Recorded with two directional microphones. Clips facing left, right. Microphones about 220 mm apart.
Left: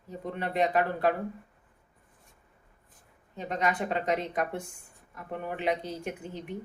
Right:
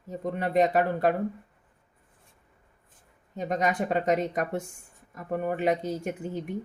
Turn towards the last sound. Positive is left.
turn(degrees=-45)  # may be behind; listen again after turning